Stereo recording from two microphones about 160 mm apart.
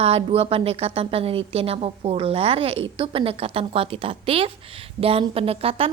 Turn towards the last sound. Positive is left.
turn(degrees=-35)  # may be behind; listen again after turning